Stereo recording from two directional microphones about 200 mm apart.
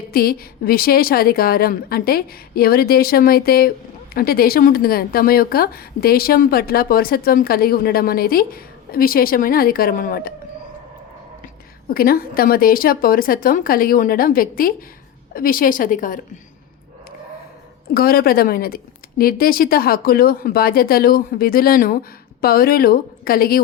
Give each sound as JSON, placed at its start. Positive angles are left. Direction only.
{"t": 0.1, "sound": "speech", "side_deg": 50}
{"t": 11.9, "sound": "speech", "side_deg": 50}
{"t": 17.8, "sound": "speech", "side_deg": 50}